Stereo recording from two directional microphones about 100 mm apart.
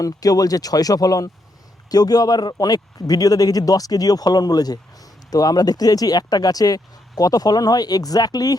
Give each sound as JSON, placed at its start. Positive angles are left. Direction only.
{"t": 0.0, "sound": "speech", "side_deg": 35}